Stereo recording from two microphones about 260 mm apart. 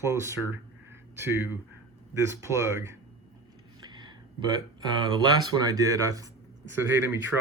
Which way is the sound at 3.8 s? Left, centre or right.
Centre.